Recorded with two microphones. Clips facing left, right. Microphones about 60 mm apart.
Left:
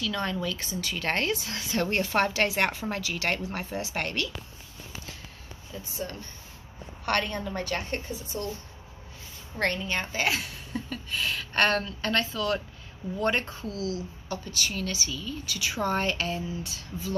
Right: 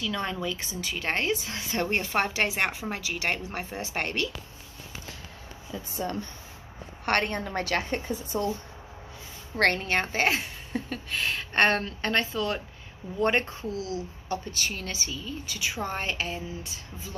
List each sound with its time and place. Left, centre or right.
0.0 s a woman's voice: centre
7.1 s a woman's voice: right
9.6 s a woman's voice: right; by 17.1 s centre